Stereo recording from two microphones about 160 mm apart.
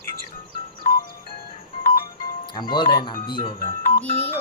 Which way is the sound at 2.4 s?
30° left (ahead or behind).